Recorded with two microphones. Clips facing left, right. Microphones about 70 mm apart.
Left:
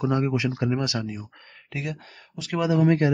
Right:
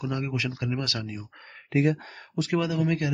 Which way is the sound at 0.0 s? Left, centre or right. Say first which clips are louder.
Left 6 dB; left.